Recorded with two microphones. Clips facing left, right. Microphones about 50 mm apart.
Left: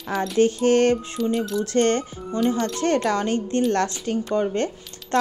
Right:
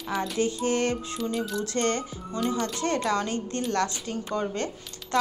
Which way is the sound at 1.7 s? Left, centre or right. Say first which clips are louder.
Left 7 dB; left.